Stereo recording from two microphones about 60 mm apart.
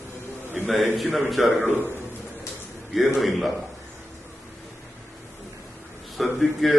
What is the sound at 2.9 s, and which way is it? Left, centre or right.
Speech, centre.